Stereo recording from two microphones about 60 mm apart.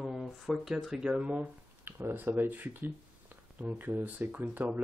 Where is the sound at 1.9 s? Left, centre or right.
Right.